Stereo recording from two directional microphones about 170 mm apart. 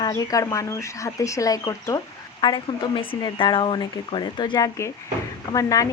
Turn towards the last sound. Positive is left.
turn(degrees=20)  # may be behind; listen again after turning